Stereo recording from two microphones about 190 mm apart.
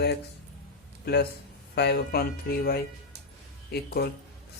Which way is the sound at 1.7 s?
60° left (ahead or behind).